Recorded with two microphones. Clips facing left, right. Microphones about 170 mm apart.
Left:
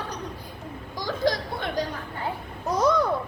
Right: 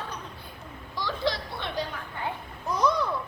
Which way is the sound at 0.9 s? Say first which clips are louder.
Left 4 dB; 45° left (ahead or behind).